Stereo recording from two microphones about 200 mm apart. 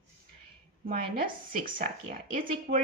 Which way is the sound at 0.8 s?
45° right (ahead or behind).